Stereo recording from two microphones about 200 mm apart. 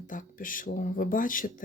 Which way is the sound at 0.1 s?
40° left (ahead or behind).